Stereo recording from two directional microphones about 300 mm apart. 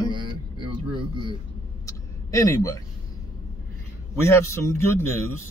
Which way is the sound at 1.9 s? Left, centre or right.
Centre.